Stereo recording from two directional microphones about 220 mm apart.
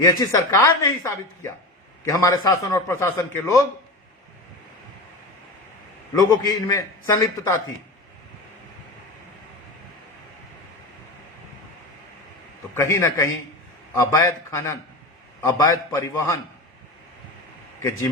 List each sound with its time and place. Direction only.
0.0 s a woman's voice: 15° left (ahead or behind)
6.1 s a woman's voice: 15° left (ahead or behind)
12.7 s a woman's voice: 15° left (ahead or behind)